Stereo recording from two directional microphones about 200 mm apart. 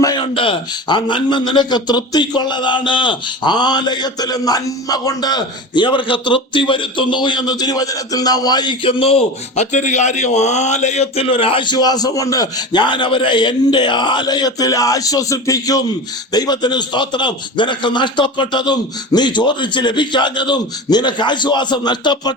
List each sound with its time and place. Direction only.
0.0 s a man's voice: 20° left (ahead or behind)